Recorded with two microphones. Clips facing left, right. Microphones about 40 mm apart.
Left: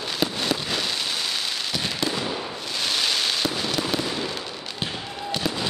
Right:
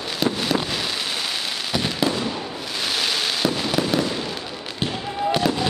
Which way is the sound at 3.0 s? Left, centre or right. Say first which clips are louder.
Right 3 dB; centre.